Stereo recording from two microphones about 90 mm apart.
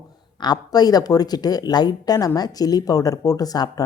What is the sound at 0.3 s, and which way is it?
Speech, 50° left (ahead or behind).